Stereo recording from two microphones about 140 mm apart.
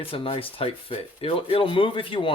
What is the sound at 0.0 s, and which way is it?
Speech, 40° left (ahead or behind).